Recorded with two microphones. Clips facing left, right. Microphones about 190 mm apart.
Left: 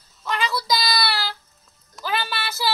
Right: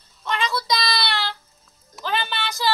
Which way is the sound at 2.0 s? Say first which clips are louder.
Right 1 dB; 5° left (ahead or behind).